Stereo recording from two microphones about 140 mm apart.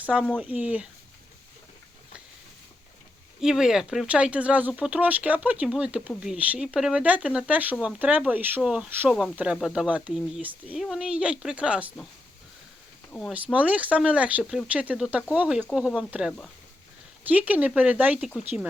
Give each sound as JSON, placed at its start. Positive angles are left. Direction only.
{"t": 0.0, "sound": "speech", "side_deg": -10}
{"t": 3.4, "sound": "speech", "side_deg": -5}
{"t": 13.3, "sound": "speech", "side_deg": -10}